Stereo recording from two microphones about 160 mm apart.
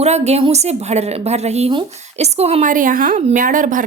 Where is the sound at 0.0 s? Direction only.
45° right (ahead or behind); by 3.2 s 60° right (ahead or behind).